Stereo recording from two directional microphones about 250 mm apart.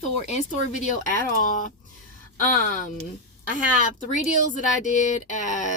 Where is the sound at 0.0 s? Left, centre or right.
Left.